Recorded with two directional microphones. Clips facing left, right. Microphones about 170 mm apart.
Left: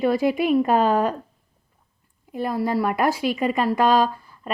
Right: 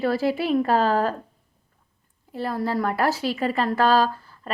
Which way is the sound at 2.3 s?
15° left (ahead or behind).